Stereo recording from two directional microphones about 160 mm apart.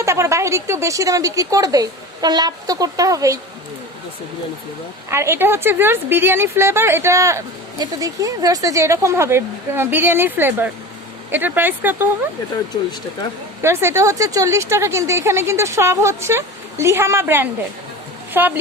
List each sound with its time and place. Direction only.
0.0 s speech: 20° right (ahead or behind)
5.0 s a woman's voice: 15° right (ahead or behind)
13.6 s a woman's voice: 15° right (ahead or behind)